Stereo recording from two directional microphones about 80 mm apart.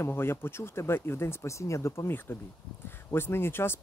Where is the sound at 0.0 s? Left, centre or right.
Left.